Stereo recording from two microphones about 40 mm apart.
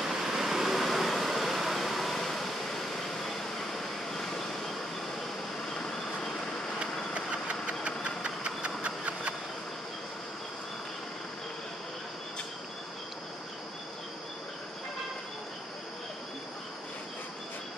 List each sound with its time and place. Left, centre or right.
0.0 s vehicle: centre
7.2 s vehicle: right